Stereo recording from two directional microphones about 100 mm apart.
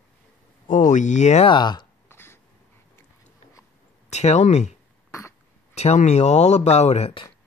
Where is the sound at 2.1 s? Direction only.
25° left (ahead or behind).